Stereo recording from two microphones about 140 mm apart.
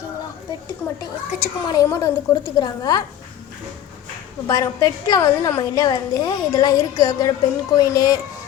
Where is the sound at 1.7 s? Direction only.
25° left (ahead or behind).